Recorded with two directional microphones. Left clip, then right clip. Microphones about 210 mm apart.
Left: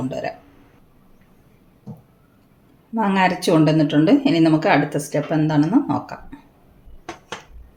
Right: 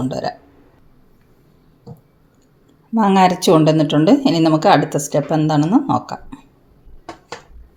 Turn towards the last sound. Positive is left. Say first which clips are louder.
# right 3 dB
turn(degrees=-35)  # may be behind; listen again after turning